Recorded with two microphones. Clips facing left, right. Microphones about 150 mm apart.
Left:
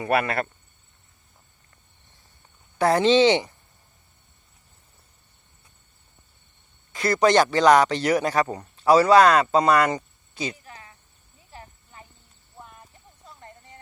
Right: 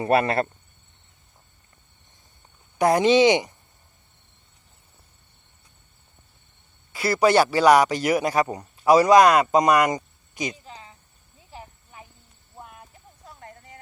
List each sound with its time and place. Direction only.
0.0 s speech: 30° right (ahead or behind)
2.7 s speech: 15° right (ahead or behind)
6.9 s speech: 5° right (ahead or behind)
11.3 s cricket: 15° right (ahead or behind)
13.2 s a sound: 5° right (ahead or behind)